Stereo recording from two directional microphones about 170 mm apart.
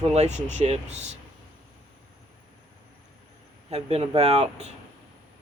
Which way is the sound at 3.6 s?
35° right (ahead or behind).